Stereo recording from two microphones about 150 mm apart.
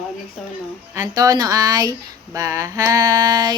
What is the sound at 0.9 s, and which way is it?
Speech, 20° right (ahead or behind).